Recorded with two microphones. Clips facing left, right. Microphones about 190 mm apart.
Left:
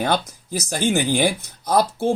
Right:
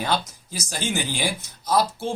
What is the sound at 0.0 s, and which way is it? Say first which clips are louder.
Speech: left 4 dB; 55° left (ahead or behind).